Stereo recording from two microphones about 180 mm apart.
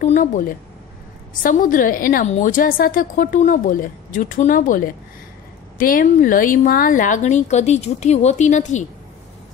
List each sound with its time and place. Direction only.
0.0 s a woman's voice: 45° left (ahead or behind)